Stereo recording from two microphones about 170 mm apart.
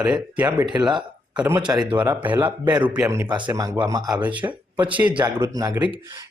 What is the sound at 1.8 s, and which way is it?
Speech, 25° right (ahead or behind).